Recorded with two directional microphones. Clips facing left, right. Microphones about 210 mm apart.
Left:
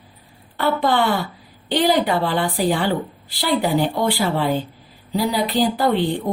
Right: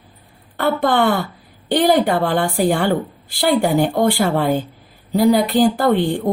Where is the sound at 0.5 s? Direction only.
50° right (ahead or behind).